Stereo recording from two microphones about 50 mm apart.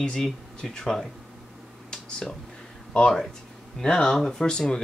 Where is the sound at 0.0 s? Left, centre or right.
Centre.